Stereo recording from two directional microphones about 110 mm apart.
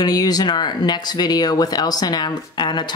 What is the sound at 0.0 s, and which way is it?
Speech, 35° left (ahead or behind).